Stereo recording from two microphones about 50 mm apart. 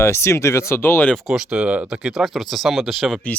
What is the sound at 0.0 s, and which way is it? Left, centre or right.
Speech, left.